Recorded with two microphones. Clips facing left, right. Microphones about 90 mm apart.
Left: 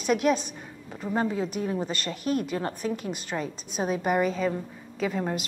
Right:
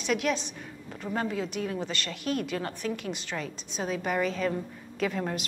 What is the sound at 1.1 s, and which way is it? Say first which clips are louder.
Speech: left 4 dB; 20° left (ahead or behind).